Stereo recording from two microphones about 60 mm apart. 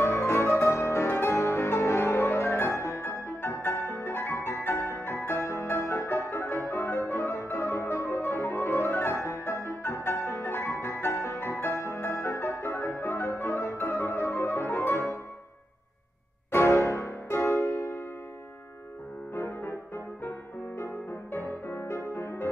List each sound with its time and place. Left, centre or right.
0.0 s music: left
9.2 s piano: left
16.5 s music: left
19.3 s piano: left
20.2 s music: left